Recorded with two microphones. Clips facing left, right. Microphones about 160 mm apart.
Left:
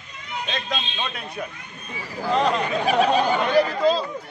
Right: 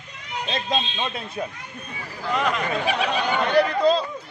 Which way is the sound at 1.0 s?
25° right (ahead or behind).